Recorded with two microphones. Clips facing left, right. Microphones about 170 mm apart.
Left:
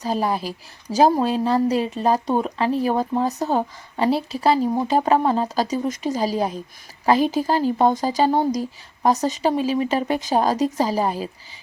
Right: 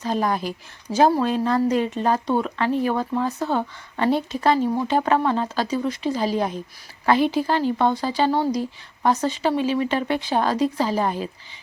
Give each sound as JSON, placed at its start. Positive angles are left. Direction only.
{"t": 0.2, "sound": "speech", "side_deg": 30}
{"t": 0.9, "sound": "speech", "side_deg": -15}
{"t": 1.2, "sound": "speech", "side_deg": 30}